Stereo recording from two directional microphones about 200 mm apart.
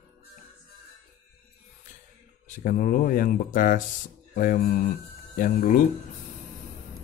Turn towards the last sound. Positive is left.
turn(degrees=40)  # may be behind; listen again after turning